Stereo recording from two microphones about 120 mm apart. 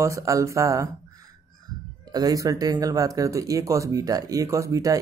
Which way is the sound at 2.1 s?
30° right (ahead or behind).